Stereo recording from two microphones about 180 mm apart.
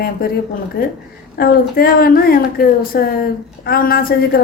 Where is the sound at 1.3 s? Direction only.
55° left (ahead or behind).